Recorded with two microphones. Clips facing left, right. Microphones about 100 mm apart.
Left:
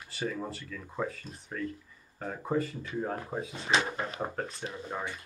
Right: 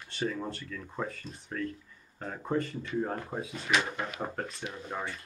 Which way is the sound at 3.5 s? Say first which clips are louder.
Left 1 dB; 30° left (ahead or behind).